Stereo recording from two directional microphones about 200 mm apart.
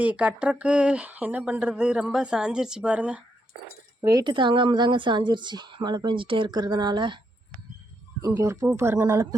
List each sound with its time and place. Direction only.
0.0 s speech: 5° right (ahead or behind)
4.0 s a woman's voice: 20° right (ahead or behind)
8.2 s speech: 15° right (ahead or behind)